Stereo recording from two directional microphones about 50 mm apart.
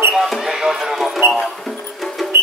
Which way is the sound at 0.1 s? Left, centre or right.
Centre.